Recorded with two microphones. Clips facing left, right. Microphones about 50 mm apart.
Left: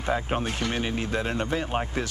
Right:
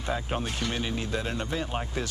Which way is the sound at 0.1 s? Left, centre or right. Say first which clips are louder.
Left 4 dB; left.